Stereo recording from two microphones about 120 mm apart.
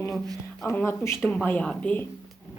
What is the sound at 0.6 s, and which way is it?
Speech, 20° left (ahead or behind).